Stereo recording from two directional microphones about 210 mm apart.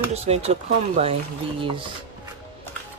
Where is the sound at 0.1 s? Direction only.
30° right (ahead or behind).